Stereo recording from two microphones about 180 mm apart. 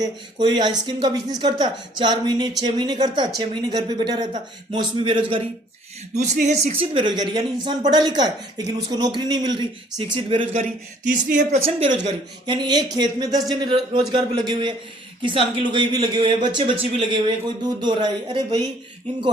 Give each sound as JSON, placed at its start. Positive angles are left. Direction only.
{"t": 0.0, "sound": "speech", "side_deg": -25}
{"t": 6.1, "sound": "speech", "side_deg": -40}
{"t": 6.9, "sound": "speech", "side_deg": -25}
{"t": 10.6, "sound": "speech", "side_deg": -45}
{"t": 12.5, "sound": "speech", "side_deg": -25}